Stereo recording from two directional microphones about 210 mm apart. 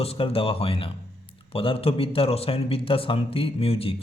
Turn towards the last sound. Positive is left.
turn(degrees=25)  # may be behind; listen again after turning